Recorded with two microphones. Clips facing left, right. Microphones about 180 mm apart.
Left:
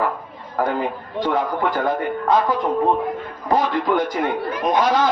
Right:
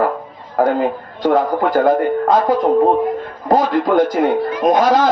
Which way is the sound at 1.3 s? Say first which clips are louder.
Right 7 dB; 45° right (ahead or behind).